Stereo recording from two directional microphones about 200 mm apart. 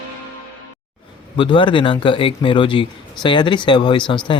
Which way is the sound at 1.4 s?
25° left (ahead or behind).